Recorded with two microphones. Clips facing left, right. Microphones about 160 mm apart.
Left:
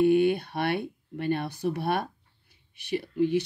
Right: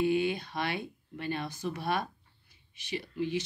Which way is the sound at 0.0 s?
60° left (ahead or behind).